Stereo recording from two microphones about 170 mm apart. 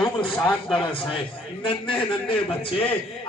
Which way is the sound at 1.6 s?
30° left (ahead or behind).